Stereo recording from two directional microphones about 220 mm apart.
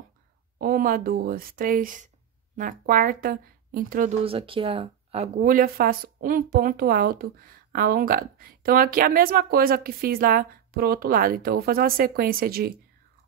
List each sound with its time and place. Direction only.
0.6 s speech: 40° right (ahead or behind)
4.2 s speech: 25° right (ahead or behind); by 12.7 s 45° right (ahead or behind)